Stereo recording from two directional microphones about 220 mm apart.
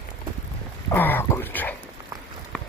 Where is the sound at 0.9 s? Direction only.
10° left (ahead or behind).